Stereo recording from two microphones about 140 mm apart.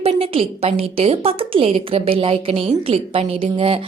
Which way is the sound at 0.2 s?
45° right (ahead or behind).